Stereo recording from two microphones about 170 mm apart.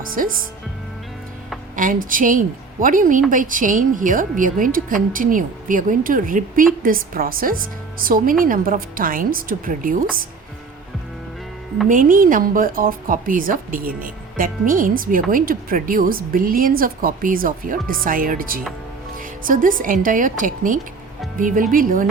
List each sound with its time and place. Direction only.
0.0 s speech: 55° right (ahead or behind)
1.7 s a woman's voice: 55° right (ahead or behind)
11.9 s a woman's voice: 50° right (ahead or behind)